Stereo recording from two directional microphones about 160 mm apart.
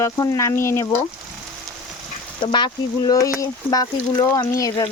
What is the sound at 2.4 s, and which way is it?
Speech, 30° left (ahead or behind).